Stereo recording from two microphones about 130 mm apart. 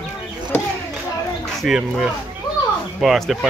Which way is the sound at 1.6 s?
Centre (ahead or behind).